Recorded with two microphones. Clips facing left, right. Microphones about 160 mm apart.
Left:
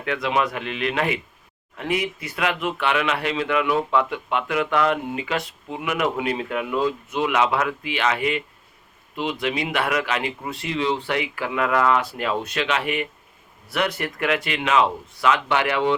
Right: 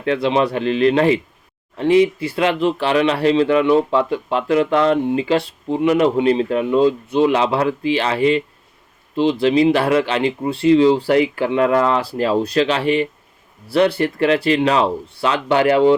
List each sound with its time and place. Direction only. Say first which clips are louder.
0.0 s speech: right 6 dB; 30° right (ahead or behind)